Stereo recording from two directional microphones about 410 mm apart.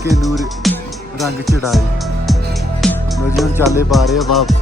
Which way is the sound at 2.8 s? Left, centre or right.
Centre.